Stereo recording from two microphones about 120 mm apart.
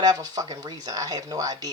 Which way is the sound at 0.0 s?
35° right (ahead or behind).